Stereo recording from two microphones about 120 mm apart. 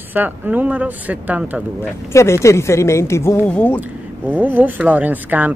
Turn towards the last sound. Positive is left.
turn(degrees=-15)  # may be behind; listen again after turning